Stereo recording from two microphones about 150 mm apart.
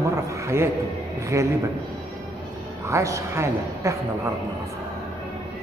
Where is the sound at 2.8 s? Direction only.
20° right (ahead or behind).